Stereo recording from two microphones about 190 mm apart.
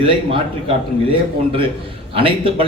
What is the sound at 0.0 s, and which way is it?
Speech, 25° right (ahead or behind).